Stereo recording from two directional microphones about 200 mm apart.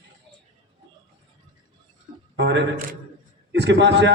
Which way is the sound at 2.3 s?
60° right (ahead or behind).